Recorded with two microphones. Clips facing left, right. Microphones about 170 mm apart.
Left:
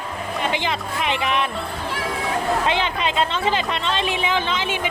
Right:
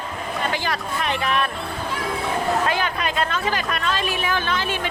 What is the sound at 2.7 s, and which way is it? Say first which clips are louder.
A woman's voice: left 1 dB; 25° left (ahead or behind).